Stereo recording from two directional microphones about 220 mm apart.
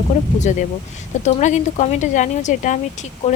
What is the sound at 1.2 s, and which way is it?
Speech, 35° left (ahead or behind).